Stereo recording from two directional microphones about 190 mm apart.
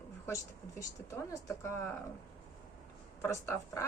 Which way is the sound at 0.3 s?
15° left (ahead or behind).